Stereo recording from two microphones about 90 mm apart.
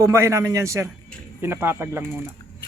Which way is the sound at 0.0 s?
30° right (ahead or behind).